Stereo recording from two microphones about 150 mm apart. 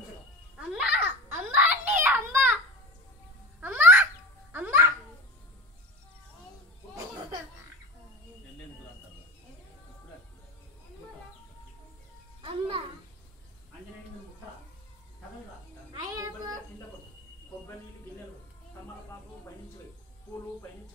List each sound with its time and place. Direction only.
0.6 s babbling: 10° right (ahead or behind)
3.6 s baby laughter: 15° right (ahead or behind)
12.4 s music: 35° right (ahead or behind)
16.0 s a sound: 25° right (ahead or behind)